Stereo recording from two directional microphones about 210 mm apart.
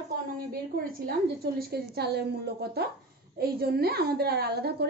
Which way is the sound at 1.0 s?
50° right (ahead or behind).